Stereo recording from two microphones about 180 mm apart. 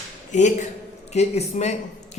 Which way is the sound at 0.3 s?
40° left (ahead or behind).